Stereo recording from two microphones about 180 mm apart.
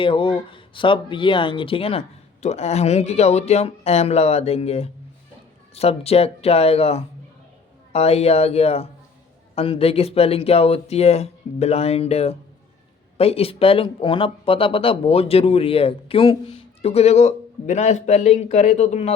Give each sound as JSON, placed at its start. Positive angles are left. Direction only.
{"t": 0.0, "sound": "speech", "side_deg": 30}